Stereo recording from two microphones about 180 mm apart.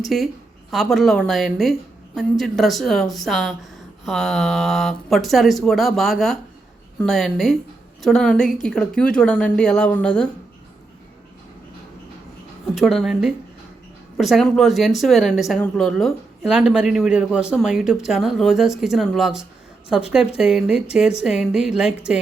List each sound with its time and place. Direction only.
0.0 s speech: centre (ahead or behind)
12.7 s speech: centre (ahead or behind)